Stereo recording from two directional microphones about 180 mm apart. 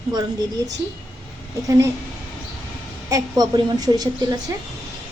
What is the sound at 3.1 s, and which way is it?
A woman's voice, 20° right (ahead or behind).